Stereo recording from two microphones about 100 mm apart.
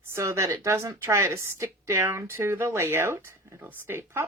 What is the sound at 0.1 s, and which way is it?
Speech, 30° right (ahead or behind).